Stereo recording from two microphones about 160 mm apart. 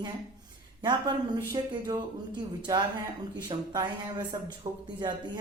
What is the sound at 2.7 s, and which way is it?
Speech, 20° right (ahead or behind).